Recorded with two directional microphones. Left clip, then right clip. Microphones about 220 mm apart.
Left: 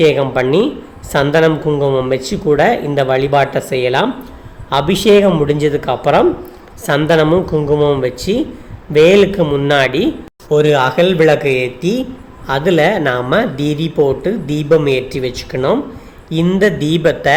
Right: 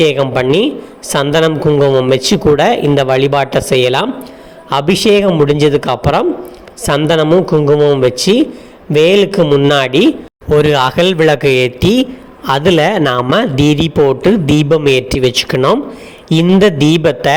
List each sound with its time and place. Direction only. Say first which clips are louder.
0.0 s a man's voice: right 1 dB; 30° right (ahead or behind)